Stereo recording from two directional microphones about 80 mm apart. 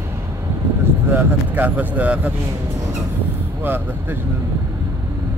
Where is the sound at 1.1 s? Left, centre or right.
Right.